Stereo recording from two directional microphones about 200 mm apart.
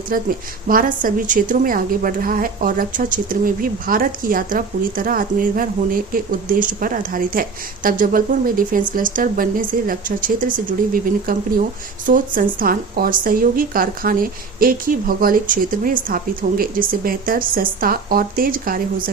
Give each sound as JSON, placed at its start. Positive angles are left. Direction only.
{"t": 0.1, "sound": "a woman's voice", "side_deg": -45}